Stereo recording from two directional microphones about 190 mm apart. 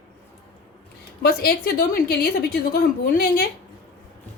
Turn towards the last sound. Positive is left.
turn(degrees=50)  # may be behind; listen again after turning